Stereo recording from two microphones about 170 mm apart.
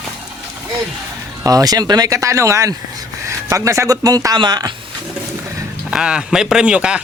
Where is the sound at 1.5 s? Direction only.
20° right (ahead or behind).